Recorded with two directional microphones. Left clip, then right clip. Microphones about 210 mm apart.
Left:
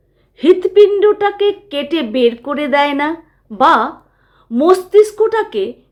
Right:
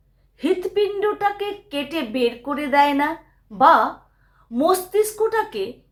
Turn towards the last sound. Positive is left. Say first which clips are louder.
# left 7 dB
turn(degrees=40)  # may be behind; listen again after turning